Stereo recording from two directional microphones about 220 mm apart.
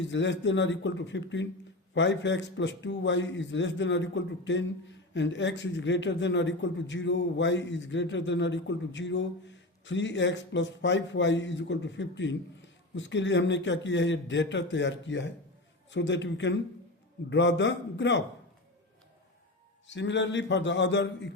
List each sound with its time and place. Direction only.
0.0 s a man's voice: 55° left (ahead or behind)
19.9 s a man's voice: 55° left (ahead or behind)